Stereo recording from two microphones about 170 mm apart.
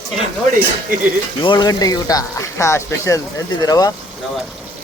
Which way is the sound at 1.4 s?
25° left (ahead or behind).